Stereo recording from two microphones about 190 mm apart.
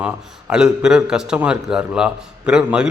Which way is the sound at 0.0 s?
5° right (ahead or behind).